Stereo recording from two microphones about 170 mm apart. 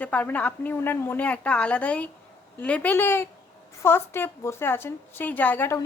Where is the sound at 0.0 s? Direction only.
10° left (ahead or behind).